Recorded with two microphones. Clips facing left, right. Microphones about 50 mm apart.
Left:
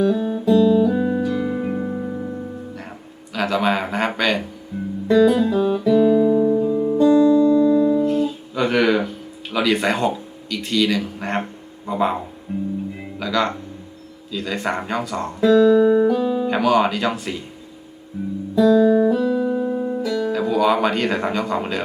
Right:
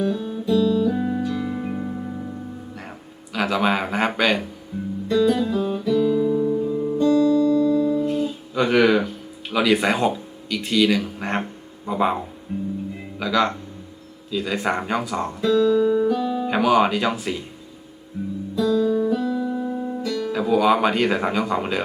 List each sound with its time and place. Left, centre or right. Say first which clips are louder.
0.1 s guitar: left 6 dB; centre
0.5 s music: left 4 dB; centre
3.3 s speech: left 1 dB; centre
5.0 s music: left 4 dB; centre
8.0 s guitar: left 3 dB; centre
11.9 s speech: left 1 dB; centre
13.1 s speech: right 1 dB; centre
15.4 s music: left 5 dB; centre
16.5 s speech: right 1 dB; centre
18.5 s guitar: left 6 dB; centre
19.1 s music: left 4 dB; centre
20.3 s speech: right 1 dB; centre